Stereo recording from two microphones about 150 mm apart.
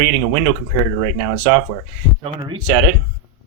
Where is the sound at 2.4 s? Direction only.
30° right (ahead or behind).